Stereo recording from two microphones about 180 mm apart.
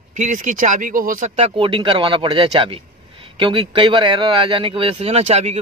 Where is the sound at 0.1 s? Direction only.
45° right (ahead or behind).